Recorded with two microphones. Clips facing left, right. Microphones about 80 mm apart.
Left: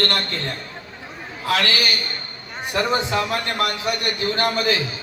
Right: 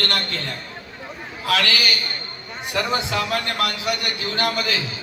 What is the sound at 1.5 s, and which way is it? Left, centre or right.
A man's voice, left.